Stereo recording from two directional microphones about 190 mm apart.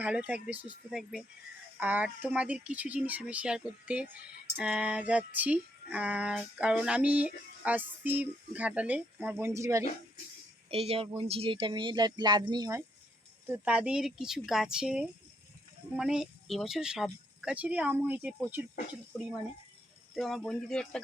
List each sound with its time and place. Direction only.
0.0 s a sound: 5° right (ahead or behind)
10.7 s speech: 30° right (ahead or behind)
13.5 s speech: 5° right (ahead or behind)
20.1 s speech: centre (ahead or behind)